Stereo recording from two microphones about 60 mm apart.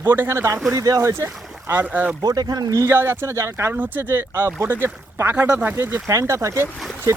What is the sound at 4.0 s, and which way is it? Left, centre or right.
Speech, right.